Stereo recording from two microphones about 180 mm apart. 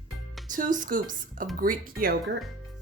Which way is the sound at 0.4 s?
45° right (ahead or behind).